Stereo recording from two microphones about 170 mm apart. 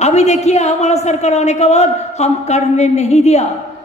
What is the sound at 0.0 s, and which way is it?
Speech, 40° left (ahead or behind).